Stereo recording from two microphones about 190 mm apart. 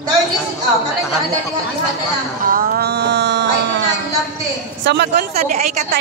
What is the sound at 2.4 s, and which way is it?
Music, 50° right (ahead or behind).